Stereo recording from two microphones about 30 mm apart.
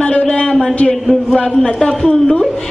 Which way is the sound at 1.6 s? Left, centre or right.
Centre.